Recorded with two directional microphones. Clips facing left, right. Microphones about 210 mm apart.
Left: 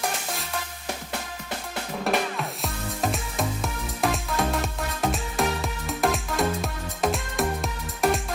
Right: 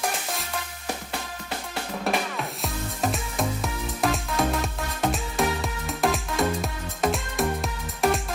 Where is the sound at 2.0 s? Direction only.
Centre (ahead or behind).